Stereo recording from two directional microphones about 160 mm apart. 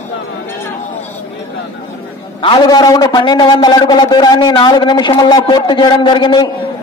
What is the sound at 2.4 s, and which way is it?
A man's voice, 30° left (ahead or behind).